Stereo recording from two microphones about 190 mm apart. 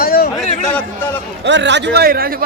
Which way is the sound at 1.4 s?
70° right (ahead or behind).